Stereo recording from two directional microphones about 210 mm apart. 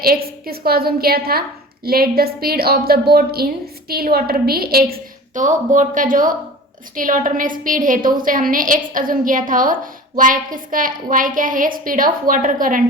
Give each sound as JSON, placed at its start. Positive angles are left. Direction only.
{"t": 0.0, "sound": "a woman's voice", "side_deg": -45}